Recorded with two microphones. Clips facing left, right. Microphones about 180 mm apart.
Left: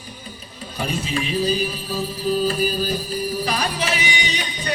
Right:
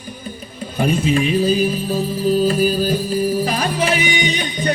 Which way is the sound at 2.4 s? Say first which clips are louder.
Right 5 dB; 40° right (ahead or behind).